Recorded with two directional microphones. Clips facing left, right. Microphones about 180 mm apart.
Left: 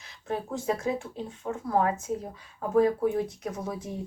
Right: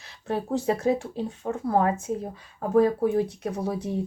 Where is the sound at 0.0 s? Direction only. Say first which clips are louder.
Right 3 dB; 35° right (ahead or behind).